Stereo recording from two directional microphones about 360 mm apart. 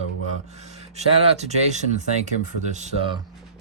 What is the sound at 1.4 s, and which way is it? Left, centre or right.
Speech, centre.